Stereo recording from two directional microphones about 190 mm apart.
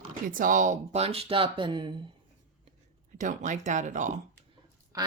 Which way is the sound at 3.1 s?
40° right (ahead or behind).